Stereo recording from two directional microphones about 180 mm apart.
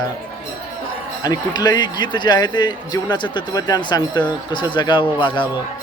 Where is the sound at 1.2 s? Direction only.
20° left (ahead or behind).